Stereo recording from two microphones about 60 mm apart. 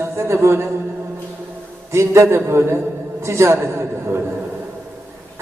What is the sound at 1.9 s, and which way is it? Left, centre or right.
A man's voice, right.